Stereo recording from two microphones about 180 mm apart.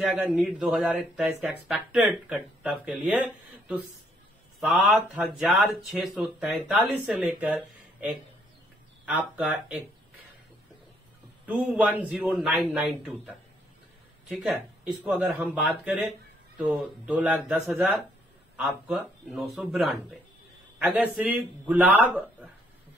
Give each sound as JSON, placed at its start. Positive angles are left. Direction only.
{"t": 0.1, "sound": "speech", "side_deg": -5}
{"t": 11.4, "sound": "speech", "side_deg": -10}